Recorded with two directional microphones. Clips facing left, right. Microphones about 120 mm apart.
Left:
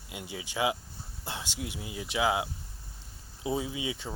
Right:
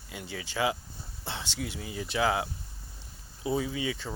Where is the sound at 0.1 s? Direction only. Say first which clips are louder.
Right 1 dB; 15° left (ahead or behind).